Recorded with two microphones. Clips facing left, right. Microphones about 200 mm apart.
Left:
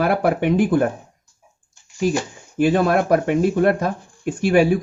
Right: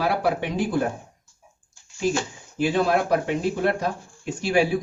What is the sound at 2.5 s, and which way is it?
Speech, 50° left (ahead or behind).